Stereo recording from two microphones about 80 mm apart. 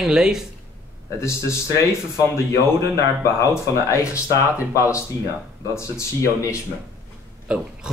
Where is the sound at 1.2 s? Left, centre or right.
Left.